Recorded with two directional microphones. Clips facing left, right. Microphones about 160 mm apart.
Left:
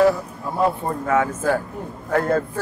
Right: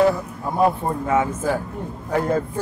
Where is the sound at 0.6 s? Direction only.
15° right (ahead or behind).